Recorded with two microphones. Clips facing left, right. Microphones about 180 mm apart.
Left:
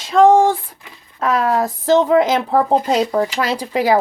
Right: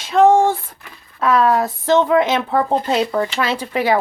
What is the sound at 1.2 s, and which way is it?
Speech, 40° left (ahead or behind).